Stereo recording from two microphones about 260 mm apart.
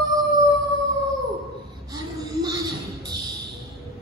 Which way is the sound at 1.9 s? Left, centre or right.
Centre.